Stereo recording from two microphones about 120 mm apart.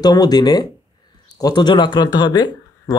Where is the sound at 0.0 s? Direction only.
35° left (ahead or behind).